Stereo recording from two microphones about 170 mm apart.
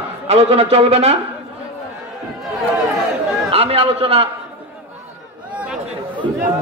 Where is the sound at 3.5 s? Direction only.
35° right (ahead or behind).